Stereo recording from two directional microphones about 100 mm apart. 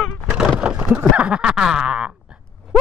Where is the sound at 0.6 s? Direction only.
10° right (ahead or behind).